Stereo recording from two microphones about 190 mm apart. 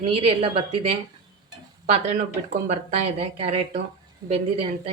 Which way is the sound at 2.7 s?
35° right (ahead or behind).